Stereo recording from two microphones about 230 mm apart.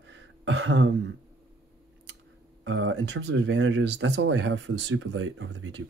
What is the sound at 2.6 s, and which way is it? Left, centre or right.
Speech, right.